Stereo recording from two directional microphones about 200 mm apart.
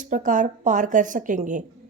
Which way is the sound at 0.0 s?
40° right (ahead or behind).